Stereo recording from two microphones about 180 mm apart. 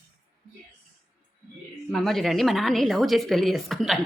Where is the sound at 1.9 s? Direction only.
Centre (ahead or behind).